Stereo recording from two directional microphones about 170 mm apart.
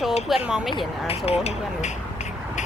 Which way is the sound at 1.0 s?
35° left (ahead or behind).